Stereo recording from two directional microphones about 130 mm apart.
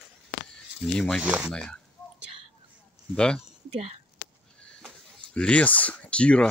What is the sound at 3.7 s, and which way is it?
Speech, 55° right (ahead or behind).